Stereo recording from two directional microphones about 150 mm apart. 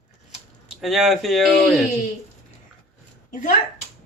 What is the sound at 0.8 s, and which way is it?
Speech, centre (ahead or behind).